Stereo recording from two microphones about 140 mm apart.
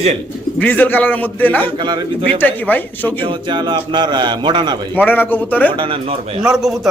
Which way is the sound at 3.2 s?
35° right (ahead or behind).